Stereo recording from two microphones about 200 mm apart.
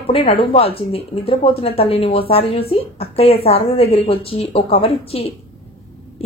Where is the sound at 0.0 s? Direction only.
30° left (ahead or behind).